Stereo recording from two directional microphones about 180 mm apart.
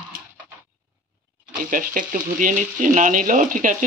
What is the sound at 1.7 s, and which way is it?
Speech, 50° right (ahead or behind).